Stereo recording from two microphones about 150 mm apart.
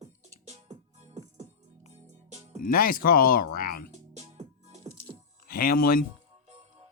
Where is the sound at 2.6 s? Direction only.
70° left (ahead or behind).